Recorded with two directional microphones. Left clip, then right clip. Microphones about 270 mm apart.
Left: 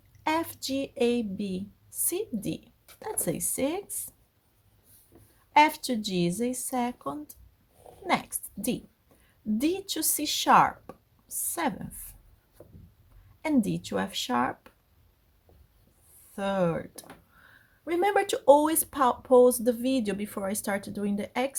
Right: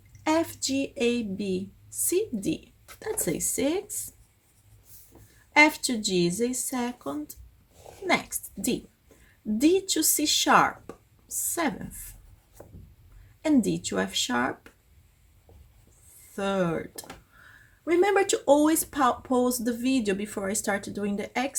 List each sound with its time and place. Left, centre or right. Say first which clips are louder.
0.2 s speech: right 3 dB; left
5.5 s a woman's voice: right 1 dB; left
13.4 s speech: right 3 dB; left
16.3 s speech: even; left